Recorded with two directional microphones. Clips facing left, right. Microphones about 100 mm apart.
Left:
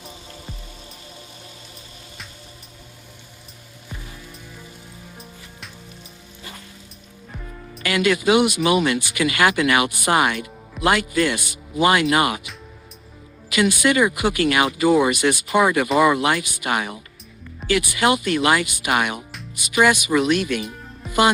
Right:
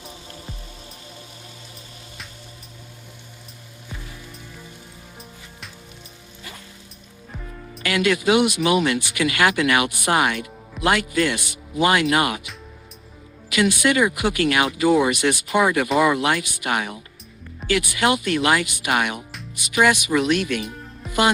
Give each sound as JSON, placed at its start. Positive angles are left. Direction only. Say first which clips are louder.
{"t": 0.0, "sound": "music", "louder": "even", "side_deg": 0}
{"t": 7.3, "sound": "music", "louder": "even", "side_deg": 0}
{"t": 7.9, "sound": "speech", "louder": "left 1 dB", "side_deg": 5}
{"t": 13.5, "sound": "speech", "louder": "left 1 dB", "side_deg": 10}